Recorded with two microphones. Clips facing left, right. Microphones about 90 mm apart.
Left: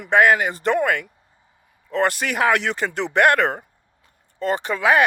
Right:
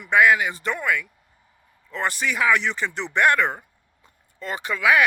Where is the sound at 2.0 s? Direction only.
60° left (ahead or behind).